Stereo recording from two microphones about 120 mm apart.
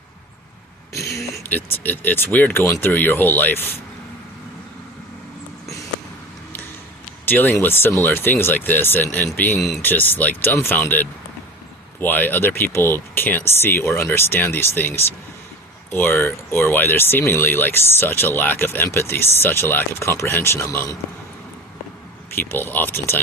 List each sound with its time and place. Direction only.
0.9 s speech: 25° left (ahead or behind)
7.3 s speech: 15° left (ahead or behind)
9.6 s speech: centre (ahead or behind)
9.8 s speech: 15° left (ahead or behind)
22.3 s speech: 20° left (ahead or behind)